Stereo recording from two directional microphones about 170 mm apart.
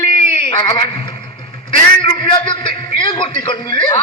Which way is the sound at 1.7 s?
30° left (ahead or behind).